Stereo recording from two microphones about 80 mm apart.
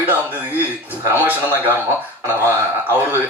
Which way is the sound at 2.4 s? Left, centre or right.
Right.